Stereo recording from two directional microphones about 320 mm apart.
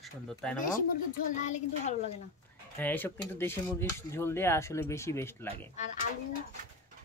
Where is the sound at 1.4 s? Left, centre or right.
Left.